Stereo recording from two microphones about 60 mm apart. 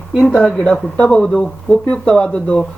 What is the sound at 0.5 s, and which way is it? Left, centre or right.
Speech, centre.